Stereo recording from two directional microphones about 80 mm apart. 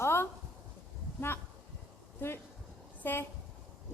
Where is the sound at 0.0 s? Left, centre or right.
Left.